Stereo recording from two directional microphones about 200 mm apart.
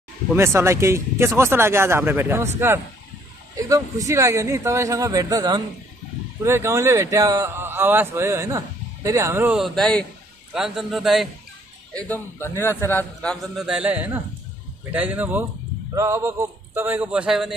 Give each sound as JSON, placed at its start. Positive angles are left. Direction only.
{"t": 0.4, "sound": "speech", "side_deg": -15}
{"t": 3.5, "sound": "a man's voice", "side_deg": -15}
{"t": 12.1, "sound": "a man's voice", "side_deg": 10}